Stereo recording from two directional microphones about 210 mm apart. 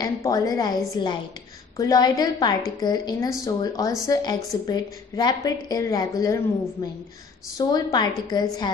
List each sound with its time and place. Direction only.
0.0 s a woman's voice: 15° left (ahead or behind)